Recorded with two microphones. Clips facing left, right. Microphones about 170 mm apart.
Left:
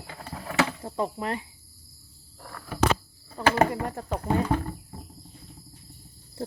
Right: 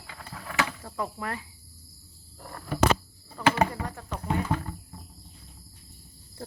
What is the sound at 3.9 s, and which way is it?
Speech, 35° left (ahead or behind).